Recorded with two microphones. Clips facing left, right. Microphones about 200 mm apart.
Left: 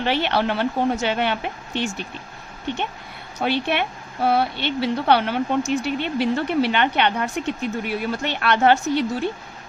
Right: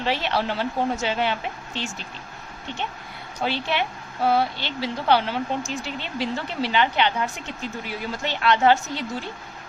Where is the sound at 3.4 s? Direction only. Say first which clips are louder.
Left 3 dB; 60° left (ahead or behind).